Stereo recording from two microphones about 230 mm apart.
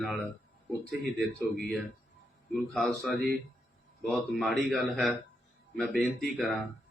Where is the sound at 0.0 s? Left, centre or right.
Centre.